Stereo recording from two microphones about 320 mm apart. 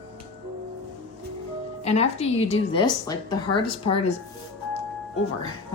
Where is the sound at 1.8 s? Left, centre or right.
Centre.